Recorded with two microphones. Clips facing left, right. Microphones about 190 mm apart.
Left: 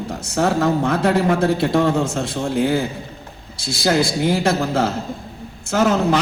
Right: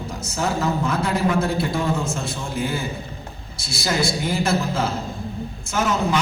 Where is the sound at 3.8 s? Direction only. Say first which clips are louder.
Left 5 dB; 70° left (ahead or behind).